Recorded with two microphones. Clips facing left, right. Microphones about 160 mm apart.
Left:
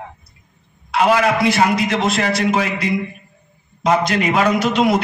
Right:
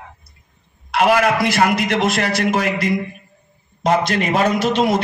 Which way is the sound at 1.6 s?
60° right (ahead or behind).